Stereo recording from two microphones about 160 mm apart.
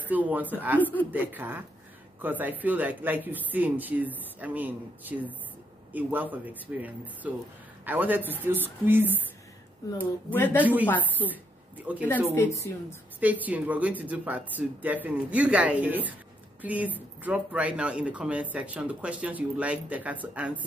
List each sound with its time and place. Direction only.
0.1 s speech: 10° right (ahead or behind)
10.0 s speech: 10° left (ahead or behind)
10.6 s speech: 10° right (ahead or behind)
11.2 s speech: 10° left (ahead or behind)
11.8 s speech: 10° right (ahead or behind)
12.7 s a woman's voice: 20° left (ahead or behind)
13.2 s speech: 10° right (ahead or behind)